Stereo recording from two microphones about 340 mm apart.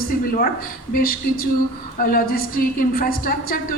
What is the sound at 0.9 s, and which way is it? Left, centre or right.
Speech, left.